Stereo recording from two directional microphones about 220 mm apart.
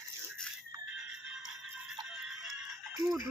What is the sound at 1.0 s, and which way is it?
Music, 5° right (ahead or behind).